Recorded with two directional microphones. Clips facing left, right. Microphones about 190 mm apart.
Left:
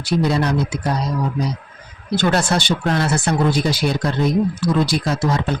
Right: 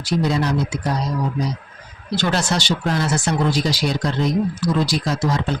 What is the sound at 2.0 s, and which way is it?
Speech, 55° left (ahead or behind).